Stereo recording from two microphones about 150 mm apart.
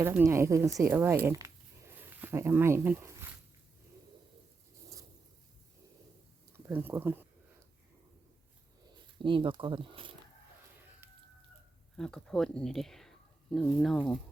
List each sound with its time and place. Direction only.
0.0 s speech: 15° right (ahead or behind)
6.7 s speech: 15° right (ahead or behind)
9.1 s speech: 35° right (ahead or behind)
11.9 s speech: 5° left (ahead or behind)